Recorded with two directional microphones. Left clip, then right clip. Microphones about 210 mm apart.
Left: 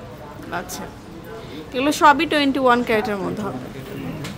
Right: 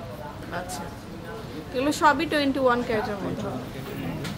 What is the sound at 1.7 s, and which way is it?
Speech, 25° left (ahead or behind).